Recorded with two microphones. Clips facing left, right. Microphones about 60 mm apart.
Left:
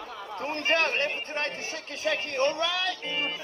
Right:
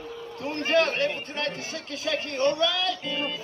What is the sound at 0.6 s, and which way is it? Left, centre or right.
Speech, left.